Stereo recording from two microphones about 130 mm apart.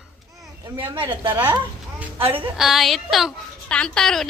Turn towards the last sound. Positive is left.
turn(degrees=5)  # may be behind; listen again after turning